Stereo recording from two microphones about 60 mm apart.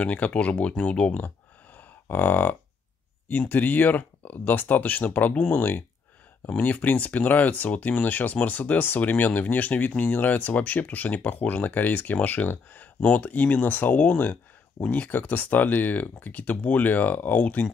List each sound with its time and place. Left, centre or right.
0.0 s speech: left
2.0 s cattle: left
3.3 s speech: left
5.5 s cattle: left
6.4 s speech: left